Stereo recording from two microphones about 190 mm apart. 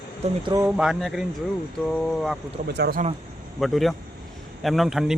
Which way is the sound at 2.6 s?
60° right (ahead or behind).